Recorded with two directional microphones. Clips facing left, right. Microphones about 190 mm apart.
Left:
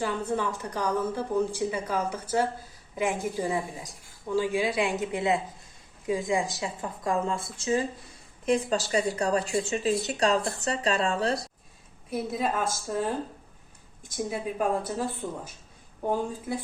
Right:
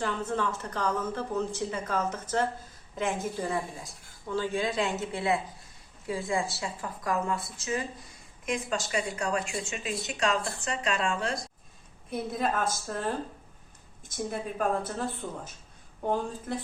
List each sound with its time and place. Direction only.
0.0 s a woman's voice: 10° left (ahead or behind); by 11.4 s 35° left (ahead or behind)
12.1 s speech: 5° left (ahead or behind)
14.3 s a woman's voice: 5° left (ahead or behind)